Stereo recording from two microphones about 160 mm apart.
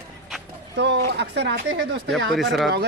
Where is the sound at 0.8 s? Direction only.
90° right.